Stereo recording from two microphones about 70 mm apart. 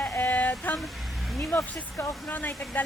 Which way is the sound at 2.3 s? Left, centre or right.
Left.